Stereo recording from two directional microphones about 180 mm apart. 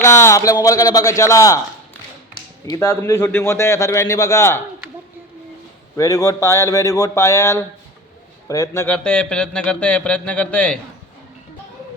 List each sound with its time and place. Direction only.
0.0 s speech: 15° left (ahead or behind)
6.0 s speech: 20° left (ahead or behind)